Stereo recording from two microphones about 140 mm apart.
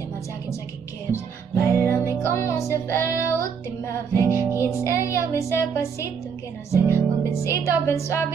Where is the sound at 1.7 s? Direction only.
20° left (ahead or behind).